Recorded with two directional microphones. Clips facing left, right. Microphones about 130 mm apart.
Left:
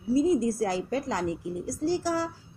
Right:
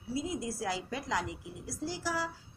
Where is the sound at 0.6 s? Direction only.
40° left (ahead or behind).